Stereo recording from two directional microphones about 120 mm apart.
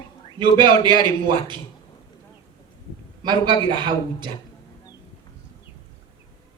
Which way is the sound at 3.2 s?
40° right (ahead or behind).